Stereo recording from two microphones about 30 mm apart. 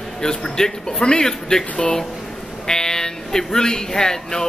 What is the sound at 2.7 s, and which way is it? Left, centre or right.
Speech, left.